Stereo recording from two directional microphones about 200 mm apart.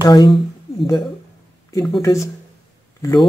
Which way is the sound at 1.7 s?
20° left (ahead or behind).